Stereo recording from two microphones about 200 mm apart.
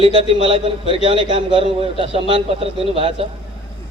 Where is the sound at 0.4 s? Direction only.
25° right (ahead or behind).